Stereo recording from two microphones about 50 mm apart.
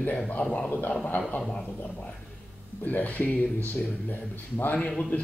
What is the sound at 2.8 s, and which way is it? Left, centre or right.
Speech, left.